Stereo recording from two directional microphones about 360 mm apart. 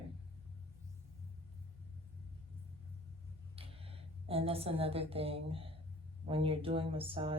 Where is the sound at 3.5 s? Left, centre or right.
Centre.